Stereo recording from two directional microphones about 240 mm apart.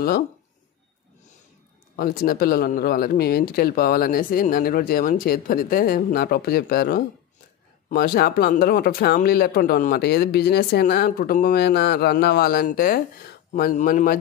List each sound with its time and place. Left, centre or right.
2.0 s speech: left